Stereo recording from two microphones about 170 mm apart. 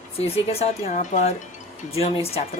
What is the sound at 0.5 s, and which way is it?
Speech, 40° left (ahead or behind).